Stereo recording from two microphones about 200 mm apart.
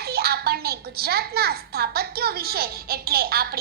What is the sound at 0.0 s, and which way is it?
A woman's voice, 50° right (ahead or behind).